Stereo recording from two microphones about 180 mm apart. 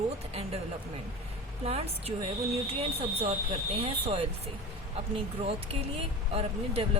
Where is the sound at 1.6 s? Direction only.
35° right (ahead or behind).